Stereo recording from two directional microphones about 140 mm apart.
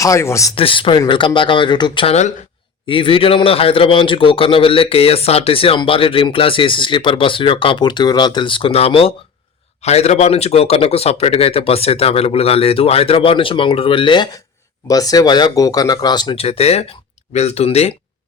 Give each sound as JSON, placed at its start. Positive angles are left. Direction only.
{"t": 0.0, "sound": "speech", "side_deg": 20}
{"t": 0.5, "sound": "a man's voice", "side_deg": 40}
{"t": 16.3, "sound": "speech", "side_deg": 45}